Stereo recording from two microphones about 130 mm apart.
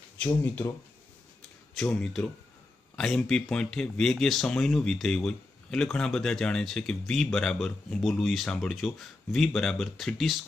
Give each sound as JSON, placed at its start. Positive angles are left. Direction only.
{"t": 0.2, "sound": "speech", "side_deg": 15}
{"t": 1.8, "sound": "speech", "side_deg": 5}